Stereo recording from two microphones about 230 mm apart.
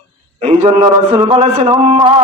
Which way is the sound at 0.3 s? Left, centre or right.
Right.